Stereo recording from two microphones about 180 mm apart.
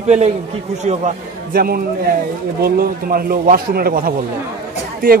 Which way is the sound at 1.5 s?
55° right (ahead or behind).